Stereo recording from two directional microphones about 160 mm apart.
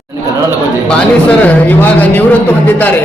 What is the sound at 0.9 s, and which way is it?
A man's voice, 10° left (ahead or behind).